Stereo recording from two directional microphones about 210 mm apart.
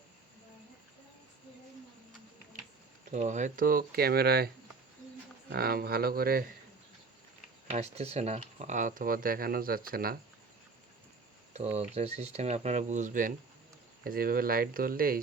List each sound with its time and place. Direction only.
3.1 s speech: 35° right (ahead or behind)
5.5 s speech: 45° right (ahead or behind)
7.7 s speech: 30° right (ahead or behind)
11.5 s speech: 30° right (ahead or behind)